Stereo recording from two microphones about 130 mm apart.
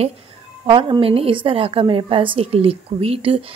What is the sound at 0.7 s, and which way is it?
A woman's voice, 40° right (ahead or behind).